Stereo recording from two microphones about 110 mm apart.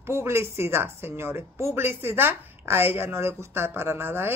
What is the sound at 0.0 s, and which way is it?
Speech, 20° right (ahead or behind).